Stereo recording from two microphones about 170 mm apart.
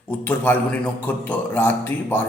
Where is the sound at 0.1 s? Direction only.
10° left (ahead or behind).